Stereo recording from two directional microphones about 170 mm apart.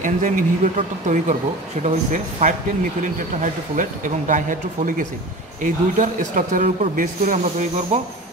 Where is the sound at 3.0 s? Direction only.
50° right (ahead or behind).